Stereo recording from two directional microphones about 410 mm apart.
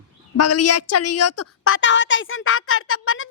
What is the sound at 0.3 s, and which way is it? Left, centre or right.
A woman's voice, left.